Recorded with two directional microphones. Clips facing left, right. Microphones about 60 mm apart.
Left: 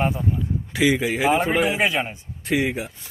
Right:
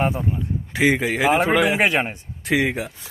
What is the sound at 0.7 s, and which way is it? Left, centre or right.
Speech, right.